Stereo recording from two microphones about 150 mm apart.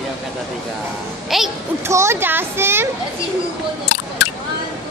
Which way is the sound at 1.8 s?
20° right (ahead or behind).